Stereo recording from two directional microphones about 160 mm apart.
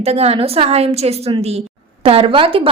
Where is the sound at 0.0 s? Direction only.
40° right (ahead or behind).